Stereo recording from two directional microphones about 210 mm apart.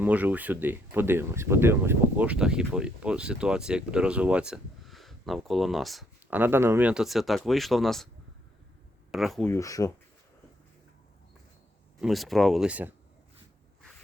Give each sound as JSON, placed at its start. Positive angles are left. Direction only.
{"t": 0.0, "sound": "speech", "side_deg": -5}
{"t": 9.1, "sound": "speech", "side_deg": 0}
{"t": 9.5, "sound": "speech", "side_deg": 15}
{"t": 11.9, "sound": "speech", "side_deg": 0}